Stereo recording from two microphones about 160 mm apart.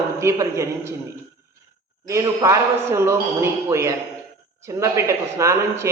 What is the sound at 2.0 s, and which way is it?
A man's voice, 20° right (ahead or behind).